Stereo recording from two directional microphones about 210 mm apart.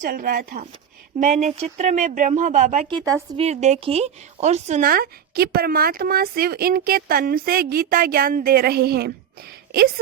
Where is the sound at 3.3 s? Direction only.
30° right (ahead or behind).